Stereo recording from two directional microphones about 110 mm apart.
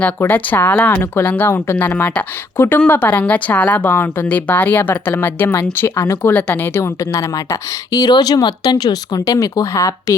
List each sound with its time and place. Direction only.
0.0 s speech: 15° left (ahead or behind)